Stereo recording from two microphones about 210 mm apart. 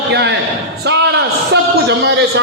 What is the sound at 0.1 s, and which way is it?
Speech, 55° right (ahead or behind).